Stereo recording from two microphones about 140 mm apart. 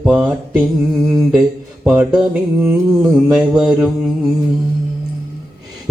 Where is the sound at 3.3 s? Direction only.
5° right (ahead or behind).